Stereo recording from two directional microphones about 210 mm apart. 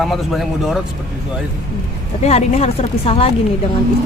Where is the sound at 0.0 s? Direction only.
Centre (ahead or behind).